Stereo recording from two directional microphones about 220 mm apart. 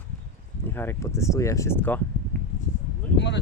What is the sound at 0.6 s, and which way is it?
Speech, 10° left (ahead or behind).